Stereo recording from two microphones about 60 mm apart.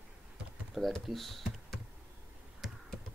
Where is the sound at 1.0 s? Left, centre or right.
Centre.